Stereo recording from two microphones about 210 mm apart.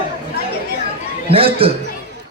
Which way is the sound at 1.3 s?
25° right (ahead or behind).